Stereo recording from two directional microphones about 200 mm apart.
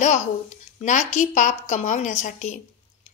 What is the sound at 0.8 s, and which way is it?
A woman's voice, 35° left (ahead or behind).